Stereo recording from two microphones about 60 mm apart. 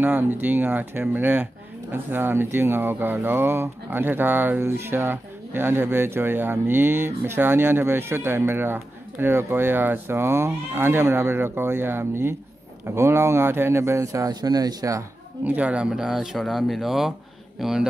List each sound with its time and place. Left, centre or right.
0.0 s speech: right
15.4 s speech: right
15.9 s speech: centre